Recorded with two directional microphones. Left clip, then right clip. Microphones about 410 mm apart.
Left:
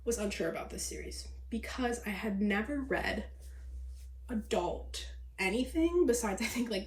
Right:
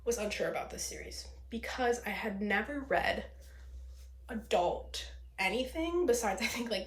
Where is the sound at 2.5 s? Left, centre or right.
Centre.